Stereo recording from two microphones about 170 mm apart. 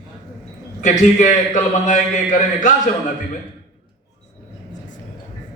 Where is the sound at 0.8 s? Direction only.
45° left (ahead or behind).